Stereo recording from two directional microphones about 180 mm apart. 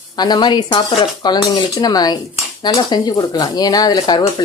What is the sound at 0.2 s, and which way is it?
Speech, 25° left (ahead or behind).